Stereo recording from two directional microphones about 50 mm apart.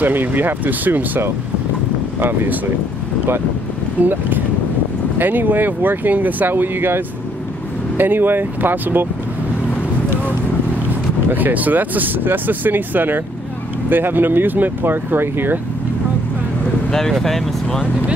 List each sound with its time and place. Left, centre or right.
0.0 s speech: right
4.0 s speech: right
8.0 s speech: right
11.3 s speech: right
16.9 s speech: centre